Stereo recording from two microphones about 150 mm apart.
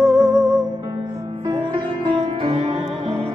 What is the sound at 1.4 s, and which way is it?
Music, 30° right (ahead or behind).